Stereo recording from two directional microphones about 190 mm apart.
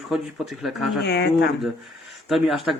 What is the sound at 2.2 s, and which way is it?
Speech, centre (ahead or behind).